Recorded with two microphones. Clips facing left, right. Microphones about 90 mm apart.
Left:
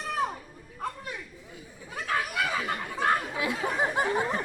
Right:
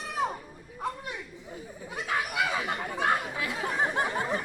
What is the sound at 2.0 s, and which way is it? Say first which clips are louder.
Chatter: even; 15° right (ahead or behind).